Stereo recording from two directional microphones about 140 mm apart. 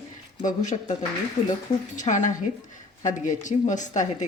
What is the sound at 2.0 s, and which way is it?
A woman's voice, 60° left (ahead or behind).